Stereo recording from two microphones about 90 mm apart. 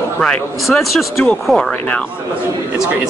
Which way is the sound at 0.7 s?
Centre (ahead or behind).